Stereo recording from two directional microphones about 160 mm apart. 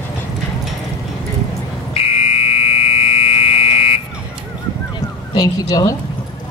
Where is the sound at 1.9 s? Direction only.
40° left (ahead or behind).